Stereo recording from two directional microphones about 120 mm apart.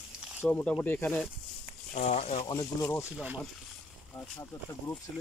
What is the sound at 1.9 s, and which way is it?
Speech, 65° left (ahead or behind).